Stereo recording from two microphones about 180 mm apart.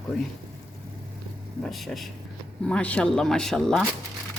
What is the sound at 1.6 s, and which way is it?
Speech, centre (ahead or behind).